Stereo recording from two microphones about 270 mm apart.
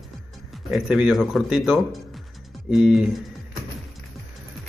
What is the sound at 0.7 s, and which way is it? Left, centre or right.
A man's voice, centre.